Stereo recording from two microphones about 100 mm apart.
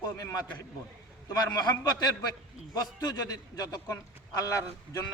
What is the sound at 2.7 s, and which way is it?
A man's voice, 40° left (ahead or behind).